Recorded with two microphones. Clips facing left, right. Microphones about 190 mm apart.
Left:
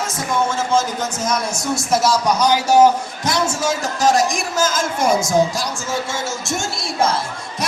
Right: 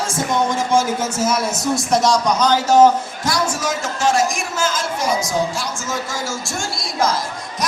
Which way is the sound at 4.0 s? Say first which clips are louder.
Left 1 dB; 35° left (ahead or behind).